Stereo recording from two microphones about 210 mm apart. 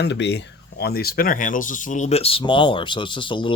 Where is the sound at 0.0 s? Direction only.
55° left (ahead or behind).